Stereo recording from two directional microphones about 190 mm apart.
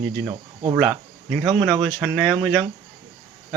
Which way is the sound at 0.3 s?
25° right (ahead or behind).